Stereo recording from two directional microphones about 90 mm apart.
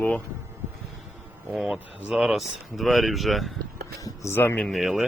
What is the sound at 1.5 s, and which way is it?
Speech, 5° right (ahead or behind).